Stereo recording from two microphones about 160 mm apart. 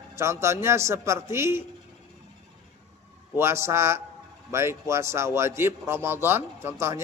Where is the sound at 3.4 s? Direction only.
15° right (ahead or behind).